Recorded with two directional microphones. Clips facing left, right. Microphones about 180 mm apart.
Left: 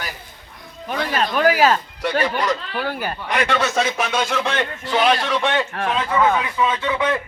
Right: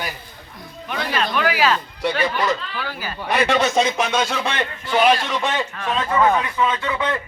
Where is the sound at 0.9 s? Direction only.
40° left (ahead or behind).